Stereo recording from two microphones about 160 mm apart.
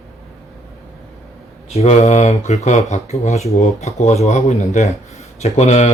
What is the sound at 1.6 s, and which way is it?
Speech, 40° left (ahead or behind).